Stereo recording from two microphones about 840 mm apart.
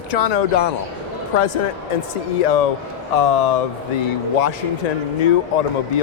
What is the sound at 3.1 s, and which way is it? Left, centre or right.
Speech, left.